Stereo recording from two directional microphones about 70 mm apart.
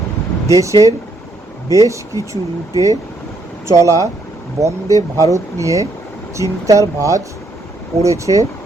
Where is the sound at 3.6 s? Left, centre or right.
Right.